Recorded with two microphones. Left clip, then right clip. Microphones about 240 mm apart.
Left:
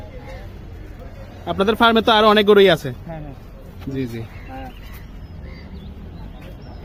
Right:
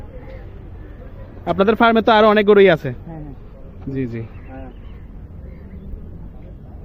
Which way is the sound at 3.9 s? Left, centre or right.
Centre.